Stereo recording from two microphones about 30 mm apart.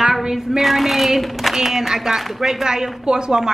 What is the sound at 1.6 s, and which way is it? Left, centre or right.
A woman's voice, centre.